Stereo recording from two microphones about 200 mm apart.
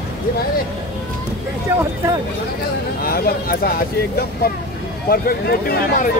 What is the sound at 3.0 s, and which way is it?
Speech, 50° left (ahead or behind).